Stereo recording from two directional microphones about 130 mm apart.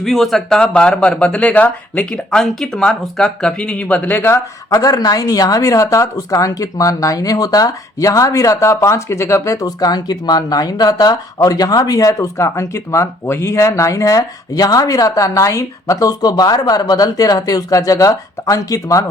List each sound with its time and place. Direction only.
0.0 s speech: centre (ahead or behind)
4.7 s speech: 30° left (ahead or behind)